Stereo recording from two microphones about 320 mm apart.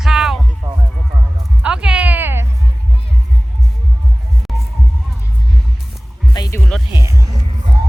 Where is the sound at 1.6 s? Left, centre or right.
Centre.